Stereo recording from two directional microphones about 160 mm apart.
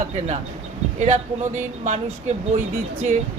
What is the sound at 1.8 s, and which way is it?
Speech, 45° right (ahead or behind).